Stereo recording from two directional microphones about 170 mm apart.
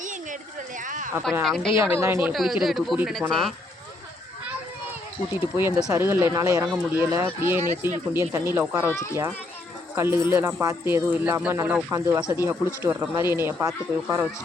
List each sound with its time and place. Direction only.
0.0 s a sound: 50° right (ahead or behind)
0.9 s speech: 50° right (ahead or behind)
1.5 s speech: centre (ahead or behind)
1.8 s speech: 15° right (ahead or behind)
2.3 s speech: centre (ahead or behind)
5.3 s speech: 15° right (ahead or behind)
8.9 s a child's voice: 15° left (ahead or behind)
9.9 s speech: 15° right (ahead or behind)